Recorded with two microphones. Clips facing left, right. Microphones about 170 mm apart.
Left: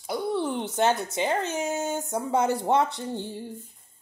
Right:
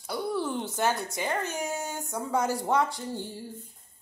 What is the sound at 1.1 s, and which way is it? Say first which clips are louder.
A woman's voice: left 4 dB; 25° left (ahead or behind).